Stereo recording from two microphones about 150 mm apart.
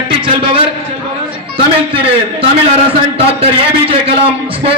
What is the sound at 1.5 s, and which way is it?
A man's voice, 35° right (ahead or behind).